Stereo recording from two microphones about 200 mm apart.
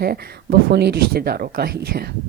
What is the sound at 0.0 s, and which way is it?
Speech, 50° right (ahead or behind).